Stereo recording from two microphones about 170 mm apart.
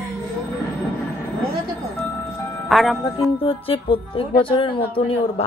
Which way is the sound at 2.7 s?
Centre (ahead or behind).